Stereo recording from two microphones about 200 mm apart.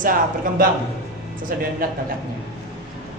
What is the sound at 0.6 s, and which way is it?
Speech, 45° right (ahead or behind).